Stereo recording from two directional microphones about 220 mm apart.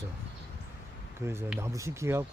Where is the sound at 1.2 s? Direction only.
10° right (ahead or behind).